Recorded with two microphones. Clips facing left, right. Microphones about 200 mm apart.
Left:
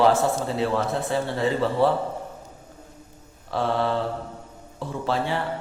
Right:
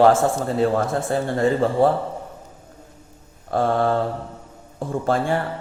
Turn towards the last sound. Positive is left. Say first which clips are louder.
# right 5 dB
turn(degrees=-50)  # may be behind; listen again after turning